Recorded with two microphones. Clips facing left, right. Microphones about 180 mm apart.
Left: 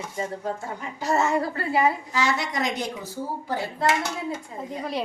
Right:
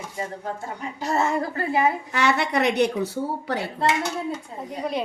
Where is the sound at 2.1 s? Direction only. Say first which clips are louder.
Right 4 dB; 65° right (ahead or behind).